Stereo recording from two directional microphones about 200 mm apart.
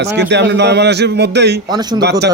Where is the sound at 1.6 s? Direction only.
20° right (ahead or behind).